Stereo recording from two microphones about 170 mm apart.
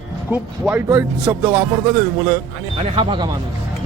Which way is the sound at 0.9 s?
20° right (ahead or behind).